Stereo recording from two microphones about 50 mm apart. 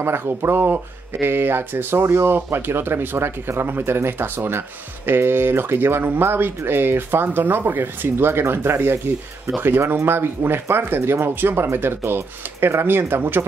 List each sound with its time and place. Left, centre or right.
0.0 s speech: right